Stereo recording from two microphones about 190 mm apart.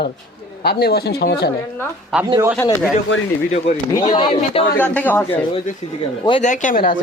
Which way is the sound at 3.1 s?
75° left (ahead or behind).